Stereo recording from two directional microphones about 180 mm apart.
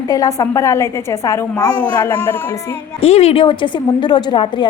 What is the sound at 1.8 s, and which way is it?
Speech, 10° left (ahead or behind).